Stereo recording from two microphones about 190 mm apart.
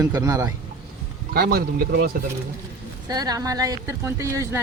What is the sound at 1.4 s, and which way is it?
Speech, 50° right (ahead or behind).